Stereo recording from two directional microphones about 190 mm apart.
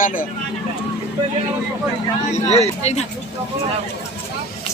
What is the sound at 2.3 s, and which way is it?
Speech, 35° left (ahead or behind).